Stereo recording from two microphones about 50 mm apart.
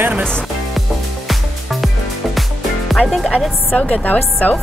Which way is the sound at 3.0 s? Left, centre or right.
Centre.